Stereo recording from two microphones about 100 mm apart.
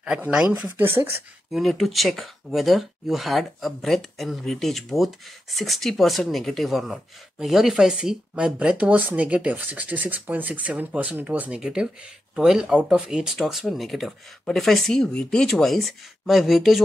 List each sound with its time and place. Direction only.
0.0 s speech: 10° right (ahead or behind)
1.5 s speech: centre (ahead or behind)